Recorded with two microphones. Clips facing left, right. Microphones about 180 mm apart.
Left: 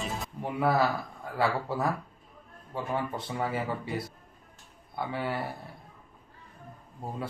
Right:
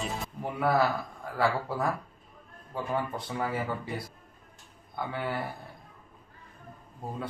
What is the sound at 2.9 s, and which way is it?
Speech, 25° left (ahead or behind).